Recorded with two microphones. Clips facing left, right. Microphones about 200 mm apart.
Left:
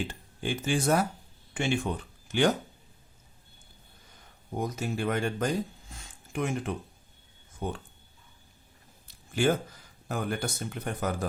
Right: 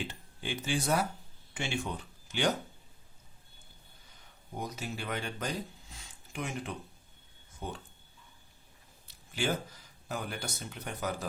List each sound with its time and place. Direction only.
0.1 s speech: 50° left (ahead or behind)
4.5 s speech: 50° left (ahead or behind)
5.9 s a sound: 50° left (ahead or behind)
7.6 s speech: 55° left (ahead or behind)
9.0 s a sound: 50° left (ahead or behind)
10.1 s speech: 50° left (ahead or behind)